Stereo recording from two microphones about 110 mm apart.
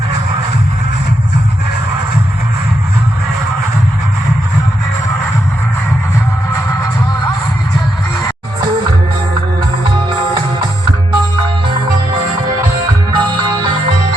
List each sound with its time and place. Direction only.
13.1 s music: 45° right (ahead or behind)